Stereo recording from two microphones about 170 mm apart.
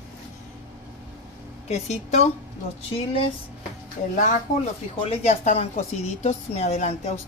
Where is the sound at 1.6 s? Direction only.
40° left (ahead or behind).